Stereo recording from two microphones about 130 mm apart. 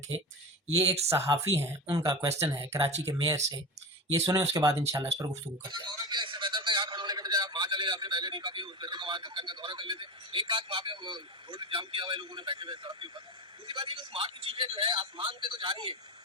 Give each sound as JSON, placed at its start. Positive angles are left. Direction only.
{"t": 0.9, "sound": "speech", "side_deg": -55}
{"t": 1.9, "sound": "a man's voice", "side_deg": -25}